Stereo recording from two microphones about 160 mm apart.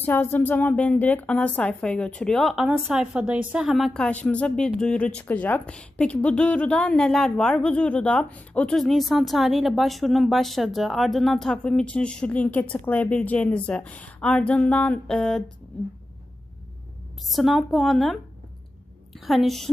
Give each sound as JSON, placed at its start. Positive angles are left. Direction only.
{"t": 0.0, "sound": "a woman's voice", "side_deg": 15}
{"t": 17.2, "sound": "a woman's voice", "side_deg": 0}